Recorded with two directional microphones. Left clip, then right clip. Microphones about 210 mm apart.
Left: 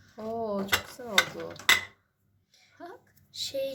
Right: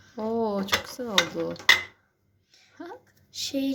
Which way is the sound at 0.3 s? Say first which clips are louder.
Right 2 dB; 35° right (ahead or behind).